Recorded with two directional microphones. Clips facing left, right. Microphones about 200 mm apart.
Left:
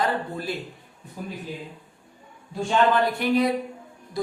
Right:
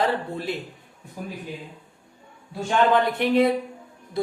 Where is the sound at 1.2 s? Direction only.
10° right (ahead or behind).